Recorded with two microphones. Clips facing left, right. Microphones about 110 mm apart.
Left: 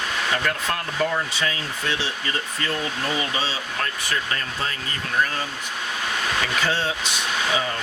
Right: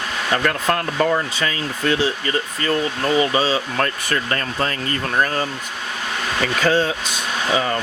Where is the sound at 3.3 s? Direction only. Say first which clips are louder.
Right 8 dB; 50° right (ahead or behind).